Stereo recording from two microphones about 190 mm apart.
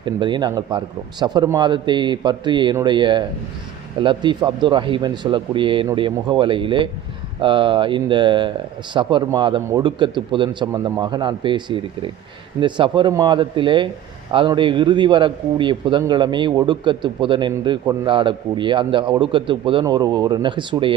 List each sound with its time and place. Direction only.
0.0 s speech: 25° right (ahead or behind)